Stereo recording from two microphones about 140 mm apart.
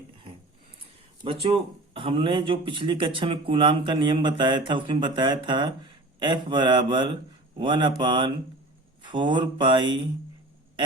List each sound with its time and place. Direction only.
1.2 s speech: 40° right (ahead or behind)